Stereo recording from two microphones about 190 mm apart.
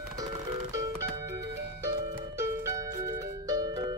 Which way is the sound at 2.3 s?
15° right (ahead or behind).